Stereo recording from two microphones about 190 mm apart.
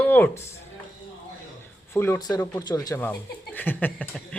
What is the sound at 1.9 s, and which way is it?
Speech, 15° left (ahead or behind).